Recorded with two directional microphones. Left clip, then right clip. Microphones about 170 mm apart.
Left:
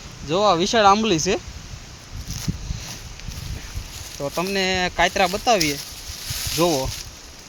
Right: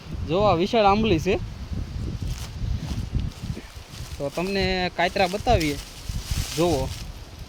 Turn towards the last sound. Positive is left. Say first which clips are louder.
# left 3 dB
turn(degrees=15)  # may be behind; listen again after turning